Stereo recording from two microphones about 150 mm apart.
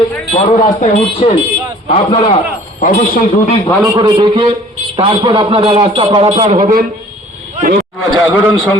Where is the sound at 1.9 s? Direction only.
40° left (ahead or behind).